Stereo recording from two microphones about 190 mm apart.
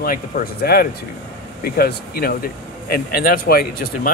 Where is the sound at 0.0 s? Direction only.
50° left (ahead or behind).